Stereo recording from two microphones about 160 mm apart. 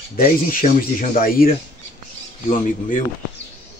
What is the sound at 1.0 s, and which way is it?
Speech, 60° left (ahead or behind).